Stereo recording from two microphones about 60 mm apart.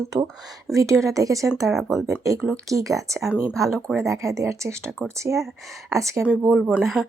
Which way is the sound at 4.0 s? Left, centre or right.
Right.